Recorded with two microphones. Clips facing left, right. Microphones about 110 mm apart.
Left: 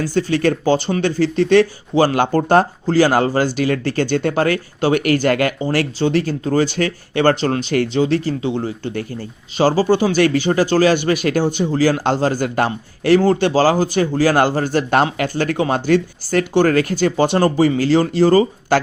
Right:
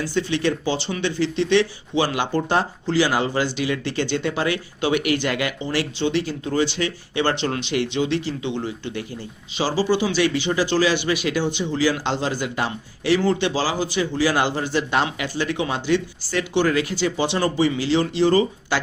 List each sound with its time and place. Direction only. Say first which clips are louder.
0.0 s speech: left 5 dB; 45° left (ahead or behind)